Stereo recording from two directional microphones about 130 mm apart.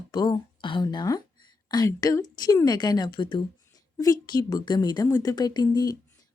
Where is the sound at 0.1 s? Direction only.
35° left (ahead or behind).